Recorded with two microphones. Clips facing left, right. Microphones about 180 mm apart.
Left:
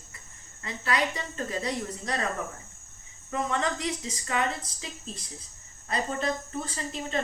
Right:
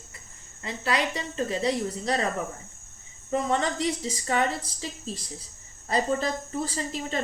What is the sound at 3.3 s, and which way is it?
Speech, 30° right (ahead or behind).